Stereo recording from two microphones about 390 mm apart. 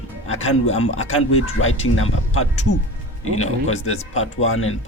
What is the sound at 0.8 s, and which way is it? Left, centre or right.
Speech, left.